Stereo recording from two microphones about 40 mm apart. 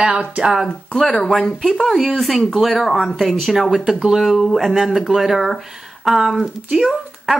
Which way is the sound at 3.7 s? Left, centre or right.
Centre.